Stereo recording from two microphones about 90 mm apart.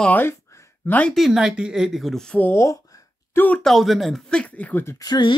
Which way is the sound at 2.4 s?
30° left (ahead or behind).